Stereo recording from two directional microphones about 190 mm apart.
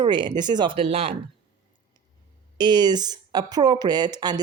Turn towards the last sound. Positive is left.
turn(degrees=-20)  # may be behind; listen again after turning